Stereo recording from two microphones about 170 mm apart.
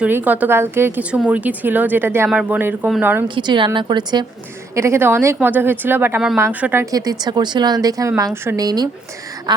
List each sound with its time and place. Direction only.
0.0 s speech: 10° right (ahead or behind)
3.2 s a woman's voice: 30° right (ahead or behind); by 6.8 s 10° right (ahead or behind)
6.9 s a woman's voice: 20° right (ahead or behind)